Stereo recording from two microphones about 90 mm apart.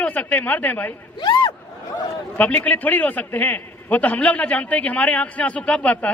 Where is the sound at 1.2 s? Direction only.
50° left (ahead or behind).